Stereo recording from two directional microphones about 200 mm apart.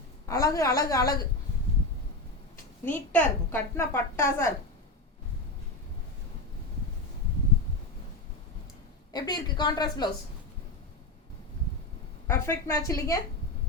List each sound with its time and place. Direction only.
0.3 s a woman's voice: 15° left (ahead or behind)
2.8 s a woman's voice: 10° left (ahead or behind)
9.1 s a woman's voice: 20° left (ahead or behind)
12.3 s a woman's voice: 15° left (ahead or behind)